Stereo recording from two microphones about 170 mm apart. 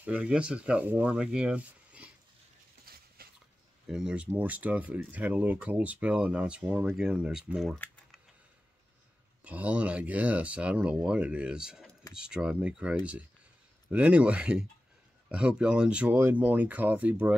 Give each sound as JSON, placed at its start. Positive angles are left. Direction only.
{"t": 0.0, "sound": "speech", "side_deg": -5}
{"t": 2.9, "sound": "dog", "side_deg": -65}
{"t": 3.8, "sound": "speech", "side_deg": -5}
{"t": 9.4, "sound": "speech", "side_deg": -10}